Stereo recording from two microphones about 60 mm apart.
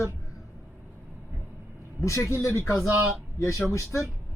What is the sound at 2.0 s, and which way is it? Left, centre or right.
Speech, left.